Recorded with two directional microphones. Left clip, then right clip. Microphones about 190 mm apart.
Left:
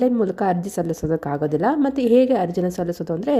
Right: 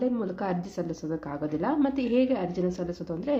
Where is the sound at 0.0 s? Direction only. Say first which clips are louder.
Left 10 dB; 40° left (ahead or behind).